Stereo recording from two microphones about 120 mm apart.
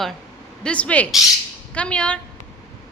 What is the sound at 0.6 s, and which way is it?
A woman's voice, 10° left (ahead or behind).